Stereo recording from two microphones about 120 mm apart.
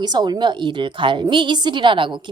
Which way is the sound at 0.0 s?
35° right (ahead or behind).